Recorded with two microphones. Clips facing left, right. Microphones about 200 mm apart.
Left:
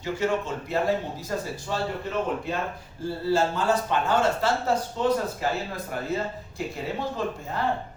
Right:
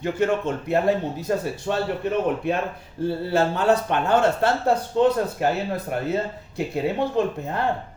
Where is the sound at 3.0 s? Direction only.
60° right (ahead or behind).